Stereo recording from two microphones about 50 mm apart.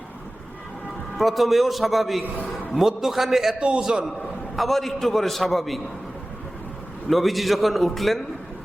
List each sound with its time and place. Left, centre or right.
1.1 s a man's voice: centre
3.6 s a man's voice: right
4.5 s a man's voice: centre
7.1 s a man's voice: centre